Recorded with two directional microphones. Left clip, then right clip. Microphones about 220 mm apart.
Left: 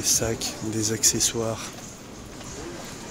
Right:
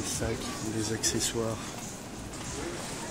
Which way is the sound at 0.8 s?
30° left (ahead or behind).